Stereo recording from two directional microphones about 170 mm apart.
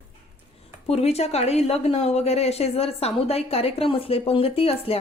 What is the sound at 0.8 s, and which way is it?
Speech, 35° left (ahead or behind).